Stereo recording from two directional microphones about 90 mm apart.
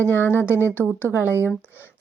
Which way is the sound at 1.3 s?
30° left (ahead or behind).